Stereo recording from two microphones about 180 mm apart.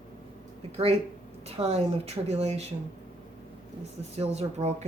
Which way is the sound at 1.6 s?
30° right (ahead or behind).